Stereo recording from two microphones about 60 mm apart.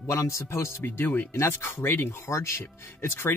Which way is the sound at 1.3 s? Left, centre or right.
Left.